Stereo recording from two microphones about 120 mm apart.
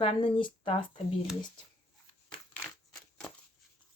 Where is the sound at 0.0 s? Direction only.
55° left (ahead or behind).